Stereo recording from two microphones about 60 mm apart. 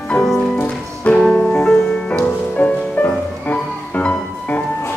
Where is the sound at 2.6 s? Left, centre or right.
Left.